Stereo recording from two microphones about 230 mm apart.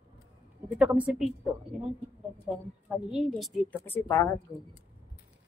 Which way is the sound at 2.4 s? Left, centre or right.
Centre.